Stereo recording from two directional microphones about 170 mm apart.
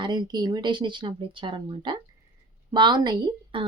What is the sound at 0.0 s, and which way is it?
A woman's voice, 25° right (ahead or behind).